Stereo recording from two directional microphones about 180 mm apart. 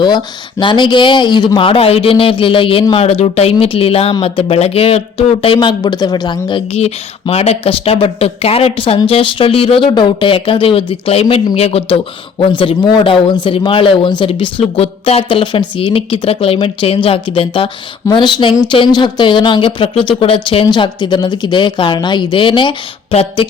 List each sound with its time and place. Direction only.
0.6 s speech: 25° left (ahead or behind)